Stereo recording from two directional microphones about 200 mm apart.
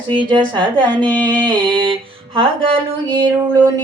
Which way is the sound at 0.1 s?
25° right (ahead or behind).